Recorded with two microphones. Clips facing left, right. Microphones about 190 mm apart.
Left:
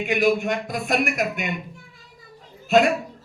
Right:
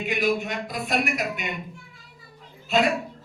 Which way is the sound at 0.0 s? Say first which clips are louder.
Left 4 dB; 45° left (ahead or behind).